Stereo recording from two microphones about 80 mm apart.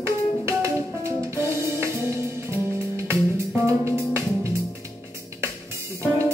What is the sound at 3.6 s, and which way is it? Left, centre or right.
Music, right.